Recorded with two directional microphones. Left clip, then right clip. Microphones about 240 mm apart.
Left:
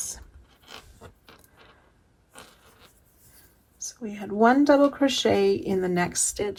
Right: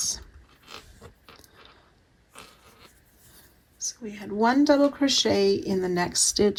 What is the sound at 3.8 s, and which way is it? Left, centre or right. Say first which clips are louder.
Speech: even; centre.